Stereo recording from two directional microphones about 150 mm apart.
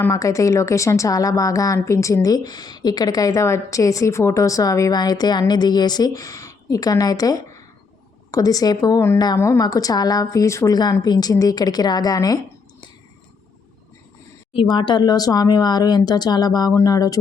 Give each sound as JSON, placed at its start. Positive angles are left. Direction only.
{"t": 0.0, "sound": "speech", "side_deg": 20}
{"t": 14.5, "sound": "speech", "side_deg": 35}